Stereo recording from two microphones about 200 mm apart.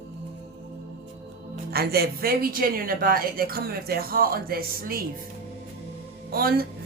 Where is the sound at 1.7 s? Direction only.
50° right (ahead or behind).